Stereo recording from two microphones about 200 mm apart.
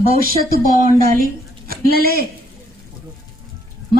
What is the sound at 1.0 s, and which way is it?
A man's voice, 45° right (ahead or behind).